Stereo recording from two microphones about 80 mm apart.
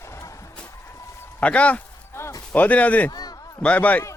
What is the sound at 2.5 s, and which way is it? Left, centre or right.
Speech, centre.